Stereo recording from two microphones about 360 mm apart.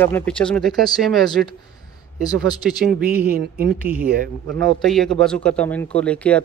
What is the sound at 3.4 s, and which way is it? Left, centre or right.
Speech, right.